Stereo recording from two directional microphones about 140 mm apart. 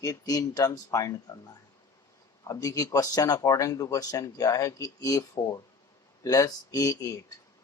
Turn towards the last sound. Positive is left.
turn(degrees=25)  # may be behind; listen again after turning